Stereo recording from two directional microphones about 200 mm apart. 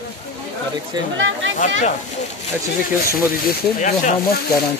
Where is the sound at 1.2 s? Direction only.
70° right (ahead or behind).